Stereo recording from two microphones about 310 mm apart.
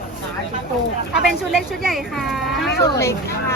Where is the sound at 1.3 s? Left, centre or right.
Centre.